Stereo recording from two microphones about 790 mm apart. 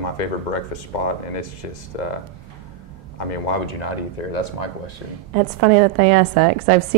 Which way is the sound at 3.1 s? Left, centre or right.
Left.